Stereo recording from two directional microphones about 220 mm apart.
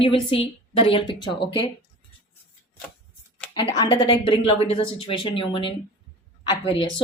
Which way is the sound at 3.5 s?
20° left (ahead or behind).